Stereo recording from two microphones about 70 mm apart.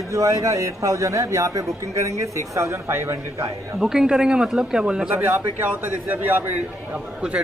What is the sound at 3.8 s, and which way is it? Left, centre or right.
Speech, centre.